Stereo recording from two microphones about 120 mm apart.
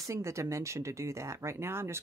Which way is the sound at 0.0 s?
25° right (ahead or behind).